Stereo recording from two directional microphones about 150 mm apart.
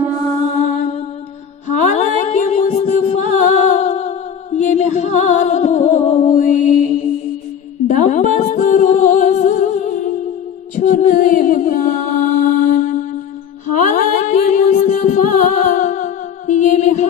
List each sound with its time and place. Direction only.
1.8 s music: 50° left (ahead or behind)